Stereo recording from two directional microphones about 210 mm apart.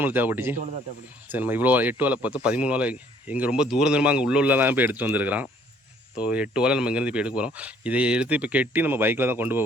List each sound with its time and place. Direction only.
0.0 s speech: 10° right (ahead or behind)